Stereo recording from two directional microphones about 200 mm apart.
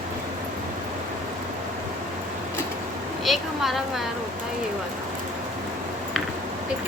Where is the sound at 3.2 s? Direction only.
Centre (ahead or behind).